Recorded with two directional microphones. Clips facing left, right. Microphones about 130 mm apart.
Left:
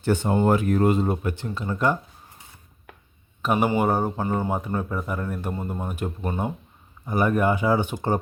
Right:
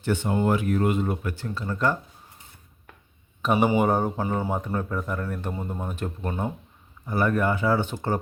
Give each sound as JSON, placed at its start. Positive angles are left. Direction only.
{"t": 0.0, "sound": "speech", "side_deg": 40}
{"t": 3.4, "sound": "speech", "side_deg": 0}
{"t": 4.5, "sound": "speech", "side_deg": 10}